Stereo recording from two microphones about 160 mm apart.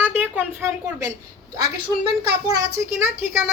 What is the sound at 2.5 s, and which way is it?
Speech, 15° right (ahead or behind).